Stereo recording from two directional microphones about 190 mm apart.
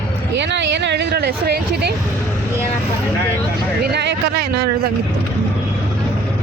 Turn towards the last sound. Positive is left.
turn(degrees=-60)  # may be behind; listen again after turning